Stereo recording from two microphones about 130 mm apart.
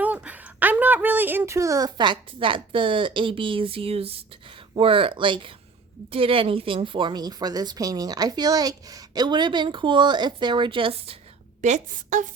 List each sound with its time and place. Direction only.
0.0 s a woman's voice: 10° right (ahead or behind); by 11.2 s 45° right (ahead or behind)
11.6 s a woman's voice: 75° right (ahead or behind)